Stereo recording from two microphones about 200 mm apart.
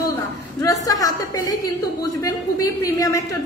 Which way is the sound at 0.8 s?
20° left (ahead or behind).